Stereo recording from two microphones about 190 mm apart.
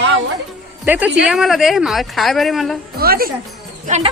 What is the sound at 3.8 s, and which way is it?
Speech, 35° right (ahead or behind).